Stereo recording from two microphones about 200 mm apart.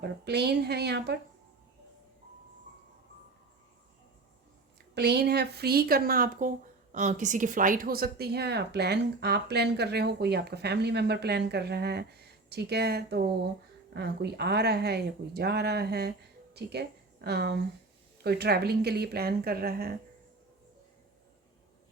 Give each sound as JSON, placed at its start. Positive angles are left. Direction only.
{"t": 0.0, "sound": "speech", "side_deg": -55}
{"t": 4.9, "sound": "speech", "side_deg": -55}